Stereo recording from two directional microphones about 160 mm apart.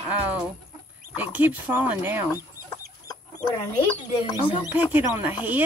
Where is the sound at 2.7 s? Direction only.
25° left (ahead or behind).